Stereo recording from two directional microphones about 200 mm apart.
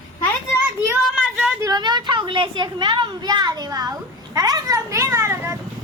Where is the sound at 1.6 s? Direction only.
20° right (ahead or behind).